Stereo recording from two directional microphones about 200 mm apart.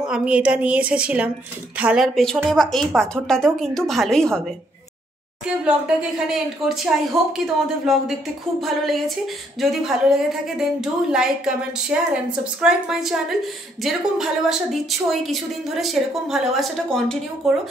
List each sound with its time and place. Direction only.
0.1 s a woman's voice: 5° right (ahead or behind)
5.6 s a woman's voice: 5° right (ahead or behind)